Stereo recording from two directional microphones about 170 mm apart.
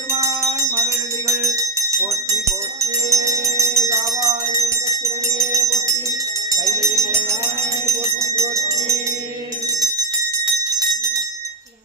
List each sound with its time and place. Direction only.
0.2 s music: 20° right (ahead or behind)
3.1 s music: 20° right (ahead or behind)
6.7 s jingle bell: 20° right (ahead or behind)
7.9 s a sound: 15° right (ahead or behind)